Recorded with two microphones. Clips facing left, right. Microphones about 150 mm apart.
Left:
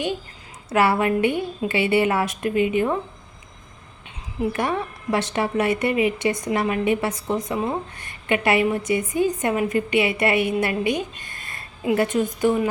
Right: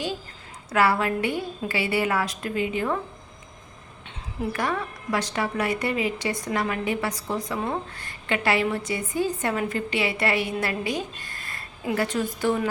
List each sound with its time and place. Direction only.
0.7 s a woman's voice: 25° left (ahead or behind)
4.5 s a woman's voice: 25° left (ahead or behind)